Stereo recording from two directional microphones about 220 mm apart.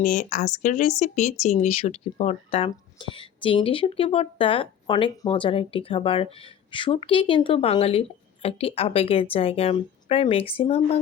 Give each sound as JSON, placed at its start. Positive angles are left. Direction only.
{"t": 0.0, "sound": "speech", "side_deg": 35}